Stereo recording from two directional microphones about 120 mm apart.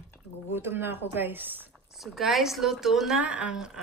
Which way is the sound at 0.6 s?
20° right (ahead or behind).